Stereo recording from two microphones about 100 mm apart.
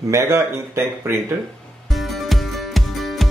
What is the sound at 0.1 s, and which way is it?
Speech, 30° right (ahead or behind).